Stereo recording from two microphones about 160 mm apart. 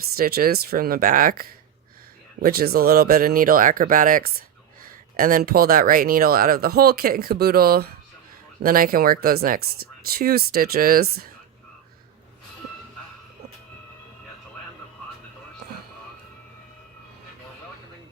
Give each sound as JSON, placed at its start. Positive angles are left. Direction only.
{"t": 0.2, "sound": "speech", "side_deg": -70}